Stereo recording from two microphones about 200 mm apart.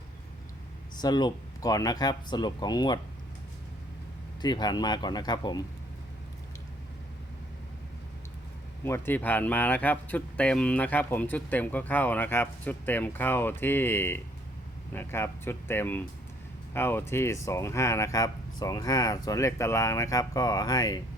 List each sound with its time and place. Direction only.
0.9 s speech: 20° left (ahead or behind)
4.4 s speech: 20° left (ahead or behind)
8.8 s speech: 10° left (ahead or behind)